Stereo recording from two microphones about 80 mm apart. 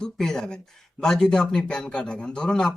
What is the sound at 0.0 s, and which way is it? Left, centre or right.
Speech, centre.